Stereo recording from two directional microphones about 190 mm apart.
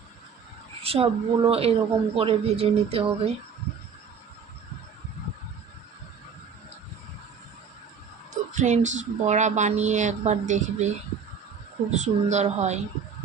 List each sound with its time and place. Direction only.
0.8 s speech: 30° right (ahead or behind)
8.5 s speech: 40° right (ahead or behind)